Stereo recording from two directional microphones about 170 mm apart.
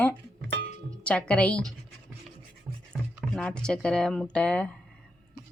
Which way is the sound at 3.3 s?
5° left (ahead or behind).